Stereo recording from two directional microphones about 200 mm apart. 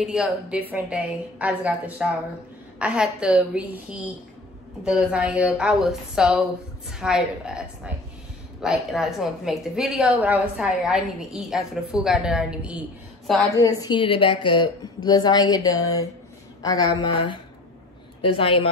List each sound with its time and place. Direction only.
0.0 s a woman's voice: 5° right (ahead or behind)
13.6 s a woman's voice: 20° left (ahead or behind)